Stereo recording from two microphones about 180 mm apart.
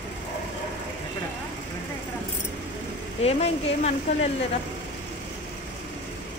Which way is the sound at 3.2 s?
35° left (ahead or behind).